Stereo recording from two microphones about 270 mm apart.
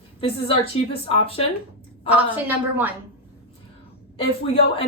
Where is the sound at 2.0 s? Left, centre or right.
Centre.